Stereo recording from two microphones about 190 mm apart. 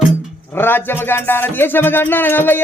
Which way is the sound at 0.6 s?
10° left (ahead or behind).